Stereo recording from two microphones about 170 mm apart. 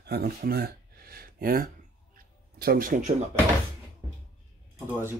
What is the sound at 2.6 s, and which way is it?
Speech, 55° right (ahead or behind).